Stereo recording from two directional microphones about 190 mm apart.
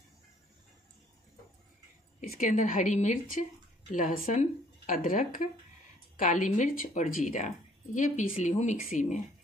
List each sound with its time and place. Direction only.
2.1 s a woman's voice: 45° left (ahead or behind)